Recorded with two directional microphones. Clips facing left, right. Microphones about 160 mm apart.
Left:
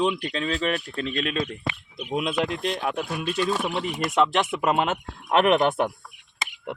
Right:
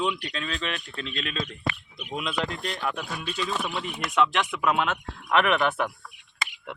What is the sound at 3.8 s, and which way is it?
Speech, 40° left (ahead or behind).